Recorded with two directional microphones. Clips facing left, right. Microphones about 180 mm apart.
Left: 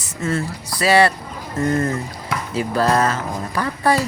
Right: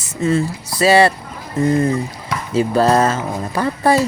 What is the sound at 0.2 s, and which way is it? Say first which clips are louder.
Speech: right 6 dB; 15° right (ahead or behind).